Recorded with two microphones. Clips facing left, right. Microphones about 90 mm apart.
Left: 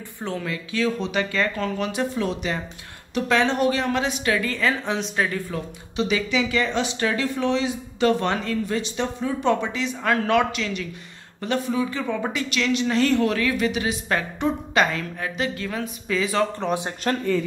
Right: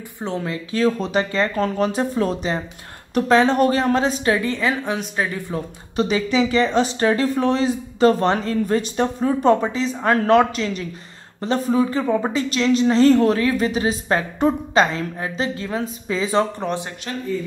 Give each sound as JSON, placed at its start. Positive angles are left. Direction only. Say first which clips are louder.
{"t": 0.2, "sound": "a woman's voice", "louder": "right 3 dB", "side_deg": -25}
{"t": 4.8, "sound": "speech", "louder": "right 1 dB", "side_deg": -5}
{"t": 5.9, "sound": "a woman's voice", "louder": "right 4 dB", "side_deg": -40}
{"t": 17.1, "sound": "speech", "louder": "left 6 dB", "side_deg": 50}